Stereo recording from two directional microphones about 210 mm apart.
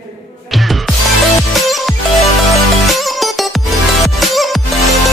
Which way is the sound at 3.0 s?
Centre (ahead or behind).